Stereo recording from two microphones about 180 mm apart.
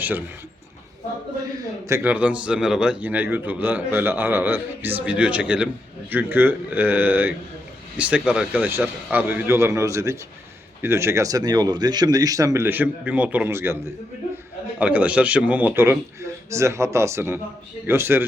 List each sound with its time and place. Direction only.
1.9 s a man's voice: 10° right (ahead or behind)
14.8 s a man's voice: 5° right (ahead or behind)